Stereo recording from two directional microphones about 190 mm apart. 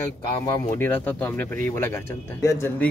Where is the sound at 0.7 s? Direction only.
10° left (ahead or behind).